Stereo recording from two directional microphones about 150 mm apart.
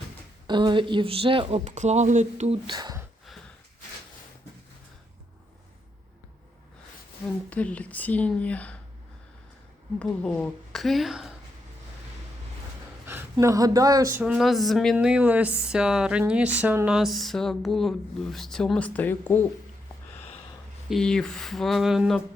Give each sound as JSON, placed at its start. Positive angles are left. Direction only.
{"t": 0.4, "sound": "speech", "side_deg": -30}
{"t": 2.6, "sound": "speech", "side_deg": -25}
{"t": 7.5, "sound": "speech", "side_deg": 10}
{"t": 10.0, "sound": "speech", "side_deg": 10}
{"t": 13.3, "sound": "speech", "side_deg": -25}
{"t": 14.2, "sound": "speech", "side_deg": -5}
{"t": 20.9, "sound": "speech", "side_deg": 5}